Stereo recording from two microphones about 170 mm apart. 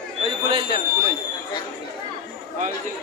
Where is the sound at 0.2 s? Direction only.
30° right (ahead or behind).